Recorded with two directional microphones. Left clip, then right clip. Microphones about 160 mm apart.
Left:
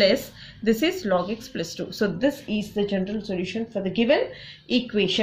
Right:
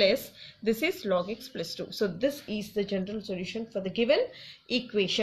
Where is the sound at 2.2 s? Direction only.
35° right (ahead or behind).